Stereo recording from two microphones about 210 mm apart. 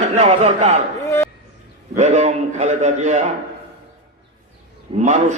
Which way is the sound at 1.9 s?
35° right (ahead or behind).